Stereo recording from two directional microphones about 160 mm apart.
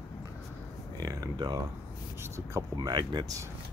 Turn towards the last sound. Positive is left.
turn(degrees=-25)  # may be behind; listen again after turning